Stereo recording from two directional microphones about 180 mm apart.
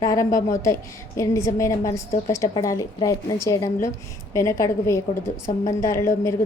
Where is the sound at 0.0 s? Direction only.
20° left (ahead or behind).